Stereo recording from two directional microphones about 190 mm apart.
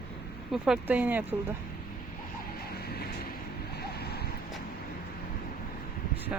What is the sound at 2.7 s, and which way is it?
Vehicle, 55° left (ahead or behind).